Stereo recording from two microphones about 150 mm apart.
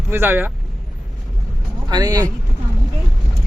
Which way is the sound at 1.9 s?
25° right (ahead or behind).